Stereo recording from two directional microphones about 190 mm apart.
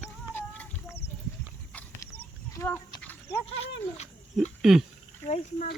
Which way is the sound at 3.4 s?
30° left (ahead or behind).